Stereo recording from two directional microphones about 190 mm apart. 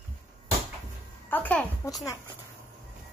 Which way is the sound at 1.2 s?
10° left (ahead or behind).